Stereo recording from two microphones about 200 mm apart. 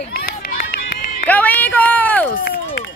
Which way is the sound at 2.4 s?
55° left (ahead or behind).